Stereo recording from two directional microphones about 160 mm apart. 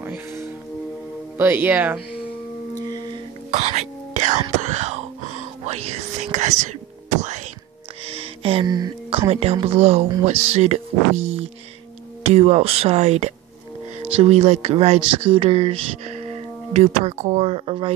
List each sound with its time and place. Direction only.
0.0 s music: 15° right (ahead or behind)
1.4 s speech: 10° right (ahead or behind)
3.5 s whispering: 45° right (ahead or behind)
5.7 s speech: 40° right (ahead or behind)
7.2 s whispering: 45° right (ahead or behind)
8.1 s music: 35° right (ahead or behind)
9.3 s speech: 35° right (ahead or behind)